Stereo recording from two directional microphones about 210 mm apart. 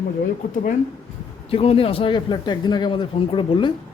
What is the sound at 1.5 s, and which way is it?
Speech, 25° left (ahead or behind).